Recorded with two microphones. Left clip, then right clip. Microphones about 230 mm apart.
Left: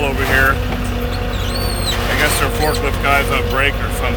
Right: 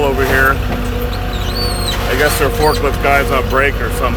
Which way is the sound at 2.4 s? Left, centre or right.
Right.